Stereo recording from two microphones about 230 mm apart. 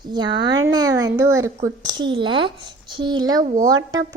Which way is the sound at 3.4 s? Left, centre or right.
Right.